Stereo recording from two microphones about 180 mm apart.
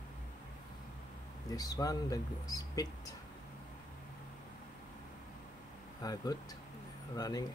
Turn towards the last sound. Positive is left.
turn(degrees=20)  # may be behind; listen again after turning